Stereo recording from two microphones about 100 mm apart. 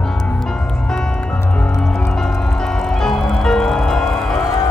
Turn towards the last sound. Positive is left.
turn(degrees=5)  # may be behind; listen again after turning